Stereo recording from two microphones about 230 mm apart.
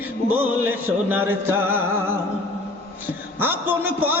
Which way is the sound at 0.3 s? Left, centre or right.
Centre.